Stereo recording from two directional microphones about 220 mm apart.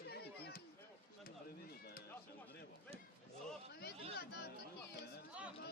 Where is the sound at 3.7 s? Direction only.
45° left (ahead or behind).